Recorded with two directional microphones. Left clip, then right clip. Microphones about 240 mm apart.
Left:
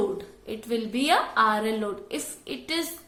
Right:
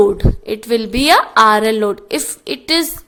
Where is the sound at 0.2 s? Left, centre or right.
Right.